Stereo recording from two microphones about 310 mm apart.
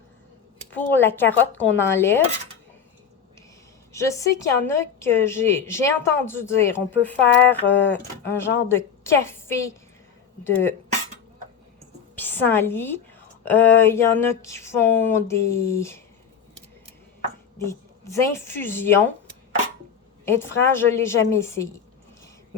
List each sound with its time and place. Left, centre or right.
0.7 s a woman's voice: centre
3.9 s a woman's voice: centre
12.1 s a woman's voice: centre
17.6 s a woman's voice: centre
20.2 s a woman's voice: centre